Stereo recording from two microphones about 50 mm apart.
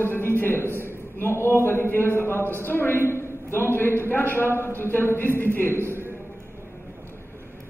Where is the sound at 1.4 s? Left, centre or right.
Left.